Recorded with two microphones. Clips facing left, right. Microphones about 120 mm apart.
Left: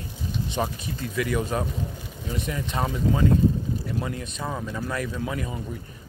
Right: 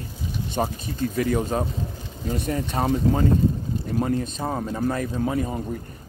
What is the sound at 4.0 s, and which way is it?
Speech, 35° right (ahead or behind).